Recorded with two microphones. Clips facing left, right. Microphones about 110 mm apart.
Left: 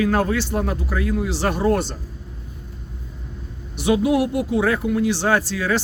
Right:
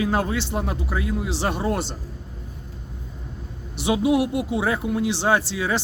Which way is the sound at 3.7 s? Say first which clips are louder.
Left 2 dB; 25° right (ahead or behind).